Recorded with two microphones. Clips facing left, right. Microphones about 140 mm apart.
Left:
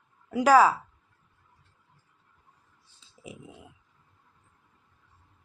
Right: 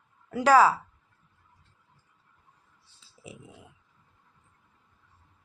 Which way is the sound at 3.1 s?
15° left (ahead or behind).